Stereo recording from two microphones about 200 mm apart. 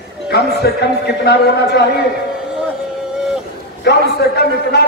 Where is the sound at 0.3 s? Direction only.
55° left (ahead or behind).